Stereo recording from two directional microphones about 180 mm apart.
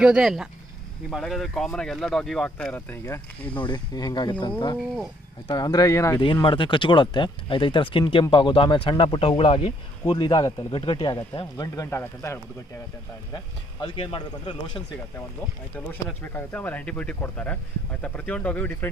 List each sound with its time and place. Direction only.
0.0 s speech: 5° right (ahead or behind)
3.5 s speech: 25° left (ahead or behind)
13.3 s speech: 25° left (ahead or behind)
15.9 s speech: 10° left (ahead or behind)